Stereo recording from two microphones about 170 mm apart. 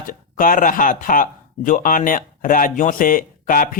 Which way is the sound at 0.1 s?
55° left (ahead or behind).